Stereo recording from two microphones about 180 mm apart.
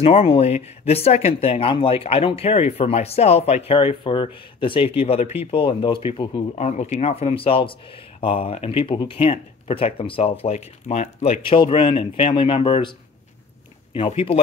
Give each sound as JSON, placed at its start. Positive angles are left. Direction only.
{"t": 0.0, "sound": "speech", "side_deg": 35}
{"t": 13.9, "sound": "speech", "side_deg": 30}